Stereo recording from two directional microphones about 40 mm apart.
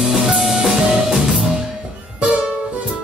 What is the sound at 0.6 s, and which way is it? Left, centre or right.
Music, centre.